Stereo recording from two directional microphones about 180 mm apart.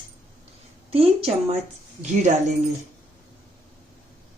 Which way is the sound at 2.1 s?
40° right (ahead or behind).